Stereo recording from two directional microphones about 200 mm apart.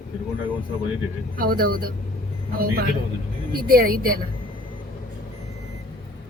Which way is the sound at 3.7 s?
50° right (ahead or behind).